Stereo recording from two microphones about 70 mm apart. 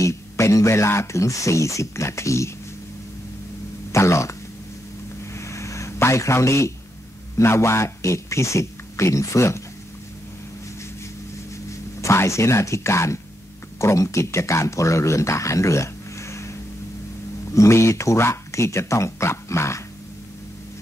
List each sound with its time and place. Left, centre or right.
0.0 s speech: left
3.9 s speech: left
5.2 s a sound: left
7.3 s speech: left
12.0 s speech: left